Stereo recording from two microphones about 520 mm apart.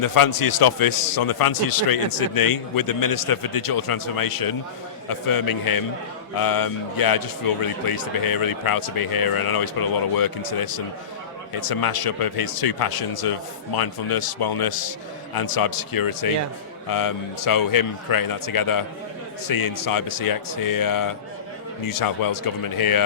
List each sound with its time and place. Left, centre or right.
0.0 s a man's voice: left